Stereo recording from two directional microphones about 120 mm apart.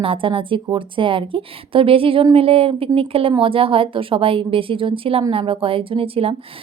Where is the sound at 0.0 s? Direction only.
45° right (ahead or behind).